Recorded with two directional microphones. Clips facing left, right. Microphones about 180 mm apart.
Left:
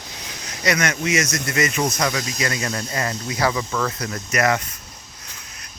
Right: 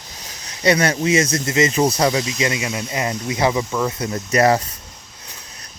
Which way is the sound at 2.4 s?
20° right (ahead or behind).